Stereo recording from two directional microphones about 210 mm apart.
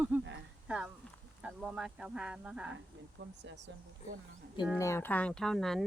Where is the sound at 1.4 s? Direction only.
5° right (ahead or behind).